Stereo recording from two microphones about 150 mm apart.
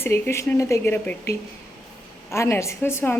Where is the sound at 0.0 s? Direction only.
15° left (ahead or behind).